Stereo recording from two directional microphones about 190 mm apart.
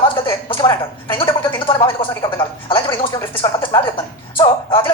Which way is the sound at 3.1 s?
15° left (ahead or behind).